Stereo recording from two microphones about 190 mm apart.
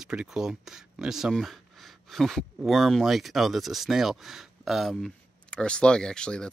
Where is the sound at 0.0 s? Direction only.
5° right (ahead or behind).